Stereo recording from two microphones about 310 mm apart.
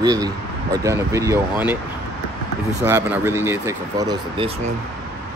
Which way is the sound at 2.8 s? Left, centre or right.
Centre.